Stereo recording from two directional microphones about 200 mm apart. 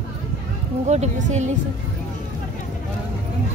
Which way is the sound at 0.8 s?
35° right (ahead or behind).